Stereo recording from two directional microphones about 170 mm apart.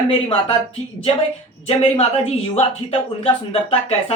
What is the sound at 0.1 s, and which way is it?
Speech, 30° left (ahead or behind).